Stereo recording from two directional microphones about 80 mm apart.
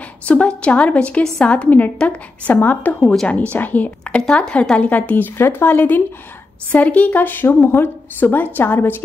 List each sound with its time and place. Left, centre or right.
0.2 s a woman's voice: centre
3.0 s a woman's voice: centre
3.5 s a woman's voice: left